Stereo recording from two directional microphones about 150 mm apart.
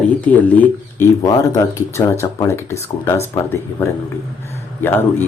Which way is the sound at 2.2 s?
20° left (ahead or behind).